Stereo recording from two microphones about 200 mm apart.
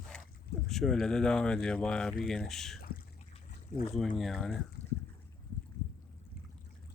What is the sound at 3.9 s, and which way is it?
Speech, centre (ahead or behind).